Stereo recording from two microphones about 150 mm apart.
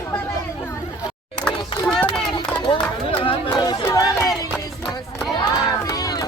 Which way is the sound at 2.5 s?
30° left (ahead or behind).